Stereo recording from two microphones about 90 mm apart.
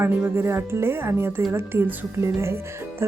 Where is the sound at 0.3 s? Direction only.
25° right (ahead or behind).